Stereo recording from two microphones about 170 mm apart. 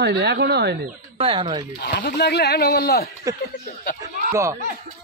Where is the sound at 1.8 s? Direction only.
75° left (ahead or behind).